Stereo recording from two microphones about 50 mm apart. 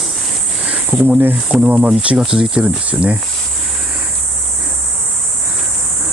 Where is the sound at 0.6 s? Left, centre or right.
Centre.